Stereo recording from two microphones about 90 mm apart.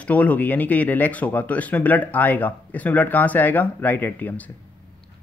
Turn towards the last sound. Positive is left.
turn(degrees=15)  # may be behind; listen again after turning